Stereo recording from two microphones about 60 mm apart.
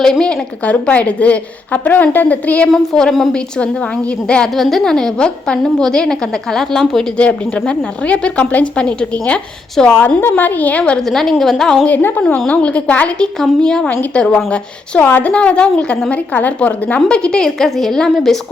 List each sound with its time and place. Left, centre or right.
0.0 s a woman's voice: centre
2.7 s a woman's voice: centre
3.6 s a woman's voice: centre
4.5 s a woman's voice: centre
7.2 s a woman's voice: left
10.3 s a woman's voice: left
11.0 s a woman's voice: centre
11.9 s a woman's voice: left; by 13.8 s centre
13.8 s a woman's voice: left
14.1 s a woman's voice: centre
15.0 s a woman's voice: left
15.3 s a woman's voice: centre
17.2 s a woman's voice: centre